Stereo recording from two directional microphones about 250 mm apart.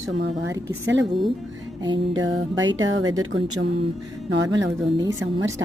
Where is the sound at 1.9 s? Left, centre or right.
Right.